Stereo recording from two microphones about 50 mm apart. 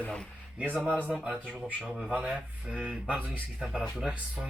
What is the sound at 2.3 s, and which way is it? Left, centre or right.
Speech, centre.